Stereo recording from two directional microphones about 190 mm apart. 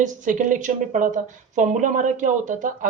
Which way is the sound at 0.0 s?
40° right (ahead or behind).